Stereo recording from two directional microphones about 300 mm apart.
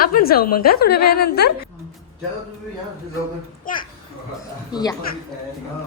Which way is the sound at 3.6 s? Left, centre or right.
Left.